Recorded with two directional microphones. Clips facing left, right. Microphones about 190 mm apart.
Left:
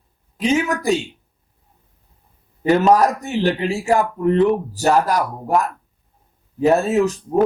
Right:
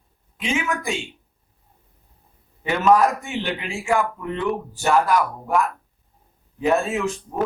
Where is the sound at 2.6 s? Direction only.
35° left (ahead or behind).